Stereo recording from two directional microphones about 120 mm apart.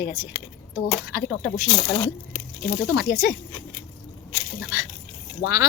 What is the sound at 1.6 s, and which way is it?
Speech, 35° left (ahead or behind).